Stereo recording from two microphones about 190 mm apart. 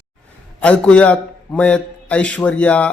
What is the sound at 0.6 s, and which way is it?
A man's voice, 5° left (ahead or behind).